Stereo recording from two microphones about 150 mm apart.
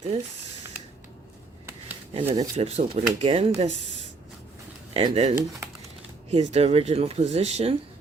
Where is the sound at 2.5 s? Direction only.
45° right (ahead or behind).